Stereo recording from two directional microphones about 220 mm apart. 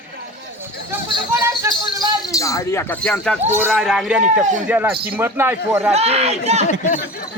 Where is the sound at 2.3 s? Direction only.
15° left (ahead or behind); by 5.9 s 10° right (ahead or behind).